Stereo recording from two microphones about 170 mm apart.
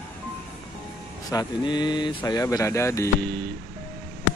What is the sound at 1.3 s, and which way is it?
Speech, 25° left (ahead or behind).